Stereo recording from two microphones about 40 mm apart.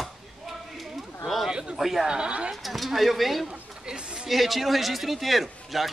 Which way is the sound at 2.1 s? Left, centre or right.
Right.